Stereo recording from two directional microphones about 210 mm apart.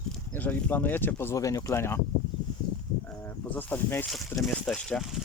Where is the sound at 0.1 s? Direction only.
10° left (ahead or behind).